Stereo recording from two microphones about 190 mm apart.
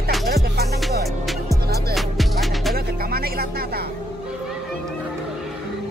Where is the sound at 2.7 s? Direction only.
55° right (ahead or behind).